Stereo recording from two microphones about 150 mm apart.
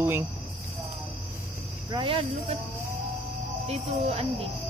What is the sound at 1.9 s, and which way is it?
Cricket, 35° right (ahead or behind).